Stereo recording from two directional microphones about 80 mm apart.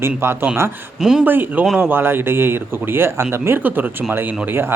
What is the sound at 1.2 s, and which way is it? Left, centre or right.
Speech, right.